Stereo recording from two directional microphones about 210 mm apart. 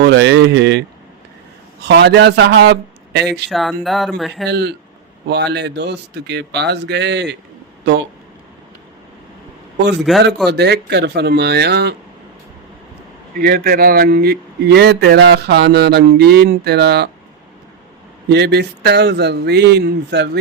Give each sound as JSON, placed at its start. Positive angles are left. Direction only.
{"t": 0.0, "sound": "speech", "side_deg": -55}
{"t": 1.8, "sound": "a man's voice", "side_deg": -50}
{"t": 3.5, "sound": "speech", "side_deg": 0}
{"t": 4.4, "sound": "a man's voice", "side_deg": -50}
{"t": 10.1, "sound": "speech", "side_deg": 0}
{"t": 10.5, "sound": "a man's voice", "side_deg": -50}
{"t": 13.3, "sound": "a man's voice", "side_deg": -45}
{"t": 18.3, "sound": "a man's voice", "side_deg": -50}